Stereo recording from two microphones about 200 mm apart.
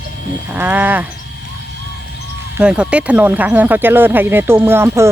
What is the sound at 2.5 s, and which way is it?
Speech, 5° right (ahead or behind).